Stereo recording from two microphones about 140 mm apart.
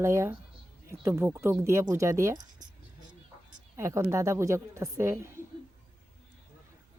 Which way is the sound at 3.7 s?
20° right (ahead or behind).